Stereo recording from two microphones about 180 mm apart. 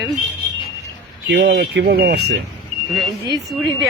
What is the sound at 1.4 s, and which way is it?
Speech, 65° right (ahead or behind).